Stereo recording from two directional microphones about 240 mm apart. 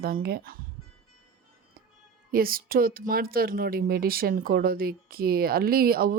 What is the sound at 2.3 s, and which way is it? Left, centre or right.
Speech, right.